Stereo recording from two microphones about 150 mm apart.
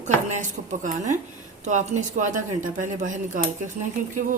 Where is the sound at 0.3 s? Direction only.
55° right (ahead or behind).